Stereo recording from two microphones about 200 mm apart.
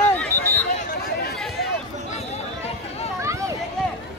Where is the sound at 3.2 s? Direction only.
15° right (ahead or behind).